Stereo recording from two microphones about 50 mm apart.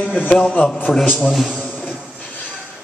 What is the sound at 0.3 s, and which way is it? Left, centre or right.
Speech, centre.